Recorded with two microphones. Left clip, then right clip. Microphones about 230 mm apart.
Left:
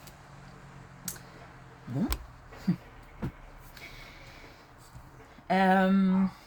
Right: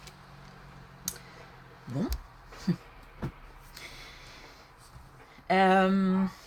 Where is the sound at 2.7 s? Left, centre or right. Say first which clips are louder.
Even; right.